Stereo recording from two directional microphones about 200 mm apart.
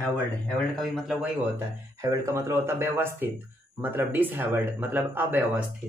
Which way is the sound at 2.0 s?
15° right (ahead or behind).